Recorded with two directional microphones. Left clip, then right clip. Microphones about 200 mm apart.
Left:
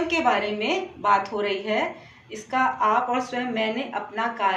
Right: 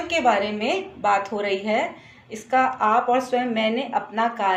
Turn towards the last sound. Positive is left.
turn(degrees=-45)  # may be behind; listen again after turning